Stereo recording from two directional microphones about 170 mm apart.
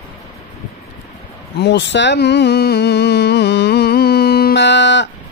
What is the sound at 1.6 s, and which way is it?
Speech, 90° left.